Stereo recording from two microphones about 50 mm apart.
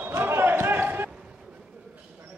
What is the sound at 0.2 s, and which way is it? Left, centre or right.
Basketball bounce, right.